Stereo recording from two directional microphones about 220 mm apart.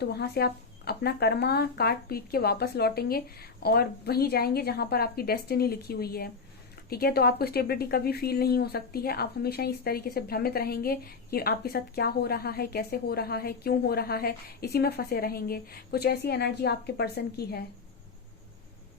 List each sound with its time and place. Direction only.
0.0 s a woman's voice: 45° left (ahead or behind)